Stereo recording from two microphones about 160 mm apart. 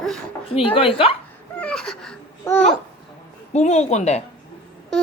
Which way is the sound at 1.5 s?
5° left (ahead or behind).